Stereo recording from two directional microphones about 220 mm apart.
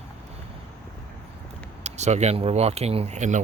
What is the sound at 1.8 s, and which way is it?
Speech, 30° right (ahead or behind).